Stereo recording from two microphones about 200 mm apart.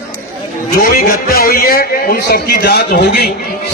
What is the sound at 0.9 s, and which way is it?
A man's voice, 45° left (ahead or behind).